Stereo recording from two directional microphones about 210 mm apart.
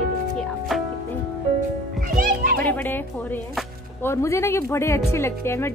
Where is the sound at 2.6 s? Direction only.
10° left (ahead or behind).